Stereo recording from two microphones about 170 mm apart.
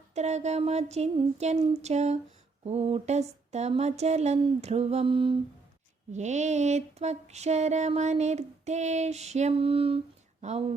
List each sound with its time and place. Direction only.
0.1 s music: 40° right (ahead or behind)
6.1 s music: 45° right (ahead or behind)
10.4 s speech: 45° right (ahead or behind)